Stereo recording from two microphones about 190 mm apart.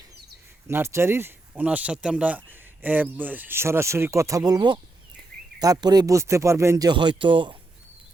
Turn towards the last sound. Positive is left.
turn(degrees=-25)  # may be behind; listen again after turning